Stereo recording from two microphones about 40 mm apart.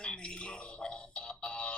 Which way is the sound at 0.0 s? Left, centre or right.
Left.